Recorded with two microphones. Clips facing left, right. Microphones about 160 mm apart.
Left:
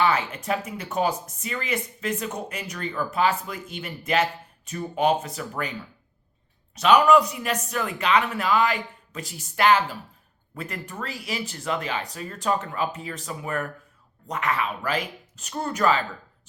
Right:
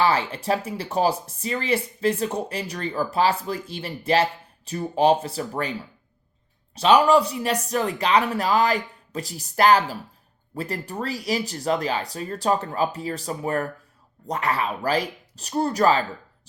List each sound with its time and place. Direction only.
0.0 s speech: 30° right (ahead or behind)
6.7 s speech: 30° right (ahead or behind)